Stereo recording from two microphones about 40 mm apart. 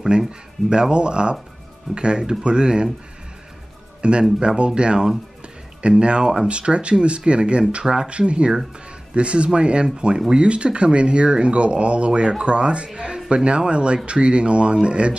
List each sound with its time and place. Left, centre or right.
0.1 s speech: right
4.0 s speech: right